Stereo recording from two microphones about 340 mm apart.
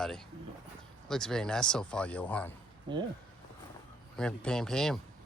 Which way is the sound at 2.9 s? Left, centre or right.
Centre.